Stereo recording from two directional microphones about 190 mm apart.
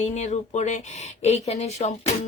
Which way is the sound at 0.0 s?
35° left (ahead or behind).